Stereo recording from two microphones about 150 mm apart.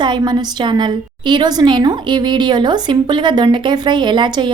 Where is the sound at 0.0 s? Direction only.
30° right (ahead or behind).